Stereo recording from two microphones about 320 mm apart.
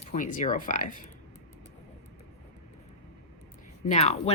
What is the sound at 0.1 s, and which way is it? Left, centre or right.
Speech, left.